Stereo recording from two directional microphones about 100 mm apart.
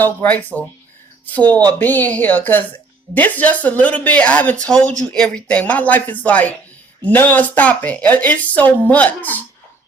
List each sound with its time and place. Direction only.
0.0 s speech: 15° left (ahead or behind)